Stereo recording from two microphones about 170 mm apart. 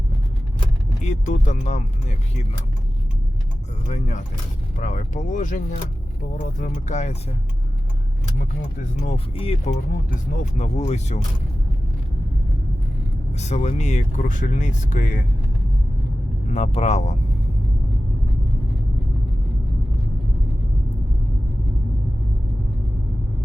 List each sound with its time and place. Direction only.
1.0 s speech: 45° left (ahead or behind)
3.8 s speech: 45° left (ahead or behind)
9.0 s speech: 35° left (ahead or behind)
13.3 s speech: 40° left (ahead or behind)
16.5 s speech: 40° left (ahead or behind)